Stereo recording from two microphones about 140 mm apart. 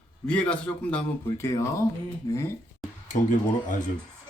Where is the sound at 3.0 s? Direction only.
60° left (ahead or behind).